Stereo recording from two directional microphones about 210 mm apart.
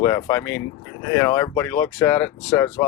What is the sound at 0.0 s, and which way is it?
Speech, 15° left (ahead or behind).